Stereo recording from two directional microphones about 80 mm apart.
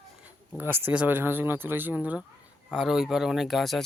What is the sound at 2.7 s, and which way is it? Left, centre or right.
Speech, centre.